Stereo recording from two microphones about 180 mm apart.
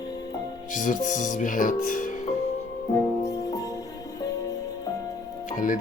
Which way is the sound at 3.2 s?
20° left (ahead or behind).